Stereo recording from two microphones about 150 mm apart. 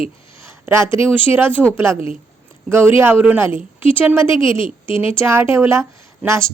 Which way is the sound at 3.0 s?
15° right (ahead or behind).